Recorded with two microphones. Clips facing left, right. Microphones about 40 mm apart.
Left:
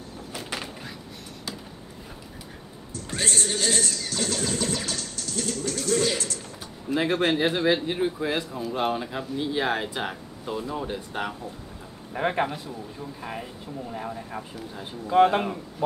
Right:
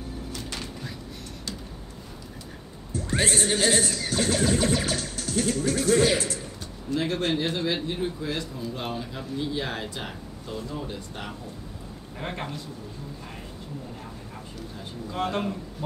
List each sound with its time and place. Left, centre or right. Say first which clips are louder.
0.3 s a sound: left 5 dB; left
2.9 s music: right 3 dB; centre
7.0 s speech: left 4 dB; left
13.9 s speech: left 7 dB; left
14.8 s speech: left 12 dB; left